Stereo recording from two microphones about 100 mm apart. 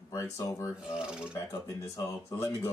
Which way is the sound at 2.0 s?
30° left (ahead or behind).